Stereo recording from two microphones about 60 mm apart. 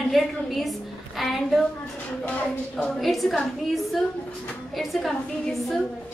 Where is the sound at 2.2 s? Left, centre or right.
Left.